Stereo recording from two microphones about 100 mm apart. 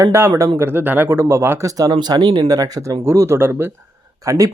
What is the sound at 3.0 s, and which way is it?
Speech, 25° right (ahead or behind).